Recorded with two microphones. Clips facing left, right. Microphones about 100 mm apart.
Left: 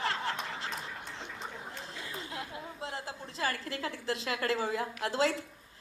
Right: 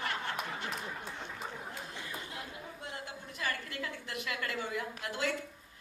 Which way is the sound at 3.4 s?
30° left (ahead or behind).